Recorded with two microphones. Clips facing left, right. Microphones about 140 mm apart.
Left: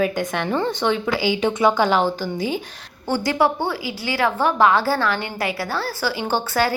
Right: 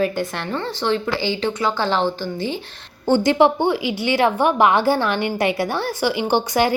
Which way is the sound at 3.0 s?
25° right (ahead or behind).